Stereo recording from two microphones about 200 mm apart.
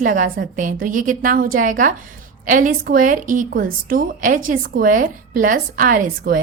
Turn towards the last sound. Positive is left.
turn(degrees=-45)  # may be behind; listen again after turning